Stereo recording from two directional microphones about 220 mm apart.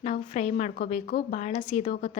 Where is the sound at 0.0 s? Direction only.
30° left (ahead or behind).